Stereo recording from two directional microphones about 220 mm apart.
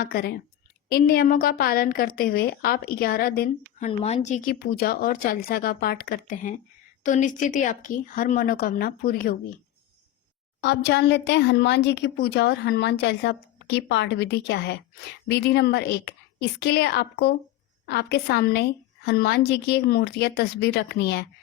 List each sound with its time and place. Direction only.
0.0 s a woman's voice: 45° left (ahead or behind)
3.8 s speech: 30° left (ahead or behind)
4.6 s a woman's voice: 45° left (ahead or behind)
10.6 s a woman's voice: 50° left (ahead or behind)